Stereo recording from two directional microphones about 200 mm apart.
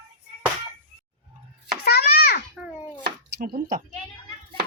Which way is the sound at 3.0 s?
50° right (ahead or behind).